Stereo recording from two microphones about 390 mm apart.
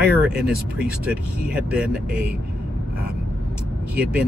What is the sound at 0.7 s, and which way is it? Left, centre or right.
Speech, centre.